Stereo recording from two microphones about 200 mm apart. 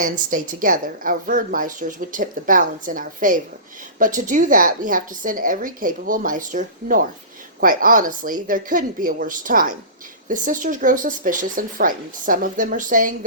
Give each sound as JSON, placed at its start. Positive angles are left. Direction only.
{"t": 0.0, "sound": "a woman's voice", "side_deg": -40}